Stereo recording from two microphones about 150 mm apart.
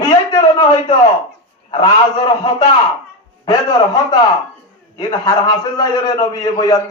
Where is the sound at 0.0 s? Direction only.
25° left (ahead or behind).